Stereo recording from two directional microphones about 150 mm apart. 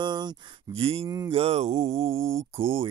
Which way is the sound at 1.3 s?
40° right (ahead or behind).